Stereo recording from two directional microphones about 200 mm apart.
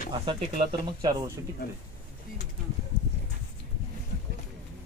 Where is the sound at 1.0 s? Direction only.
20° right (ahead or behind).